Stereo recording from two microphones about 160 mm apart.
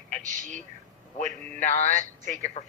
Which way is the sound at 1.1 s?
45° left (ahead or behind).